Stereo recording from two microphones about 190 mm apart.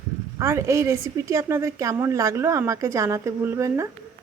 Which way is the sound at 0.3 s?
15° right (ahead or behind).